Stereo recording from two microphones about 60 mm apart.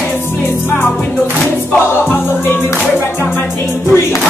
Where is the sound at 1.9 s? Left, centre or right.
Left.